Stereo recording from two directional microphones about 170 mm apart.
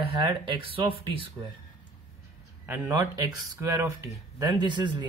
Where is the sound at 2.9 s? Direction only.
20° right (ahead or behind).